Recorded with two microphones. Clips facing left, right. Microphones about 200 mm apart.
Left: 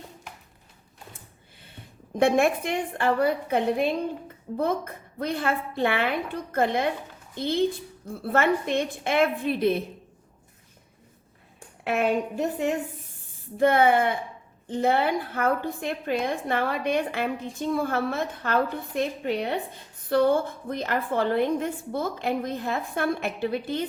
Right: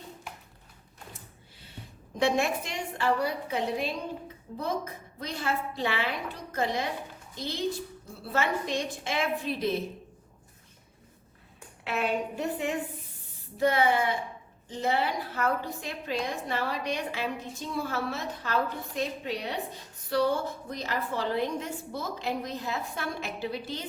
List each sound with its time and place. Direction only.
2.1 s a woman's voice: 55° left (ahead or behind)
11.9 s a woman's voice: 45° left (ahead or behind)
13.6 s a woman's voice: 55° left (ahead or behind)